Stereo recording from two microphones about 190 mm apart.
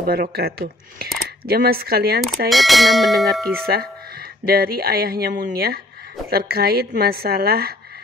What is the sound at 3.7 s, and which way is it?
Speech, 55° right (ahead or behind).